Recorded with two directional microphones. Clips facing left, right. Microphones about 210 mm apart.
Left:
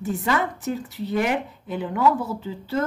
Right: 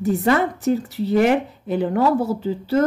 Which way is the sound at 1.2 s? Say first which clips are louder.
Right 7 dB; 45° right (ahead or behind).